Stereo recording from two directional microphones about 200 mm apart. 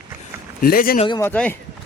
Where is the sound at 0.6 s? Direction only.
45° left (ahead or behind).